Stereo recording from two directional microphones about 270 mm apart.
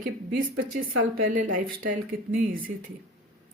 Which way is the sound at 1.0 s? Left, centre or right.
Right.